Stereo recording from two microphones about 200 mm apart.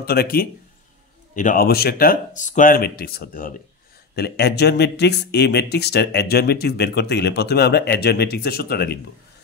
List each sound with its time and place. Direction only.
0.0 s speech: 50° left (ahead or behind)